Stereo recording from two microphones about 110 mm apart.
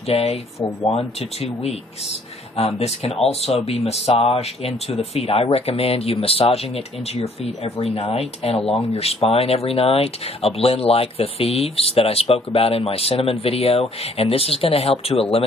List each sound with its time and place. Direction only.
0.1 s speech: 70° left (ahead or behind)